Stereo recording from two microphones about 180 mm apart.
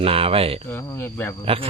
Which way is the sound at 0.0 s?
30° right (ahead or behind).